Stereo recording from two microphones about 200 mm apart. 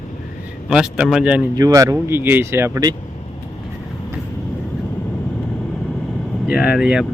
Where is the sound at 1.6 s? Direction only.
15° right (ahead or behind).